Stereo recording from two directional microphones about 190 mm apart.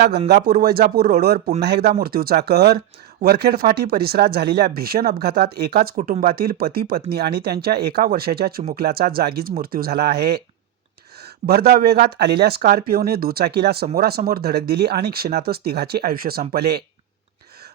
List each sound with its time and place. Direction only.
0.3 s speech: 55° right (ahead or behind)
11.4 s speech: 55° right (ahead or behind)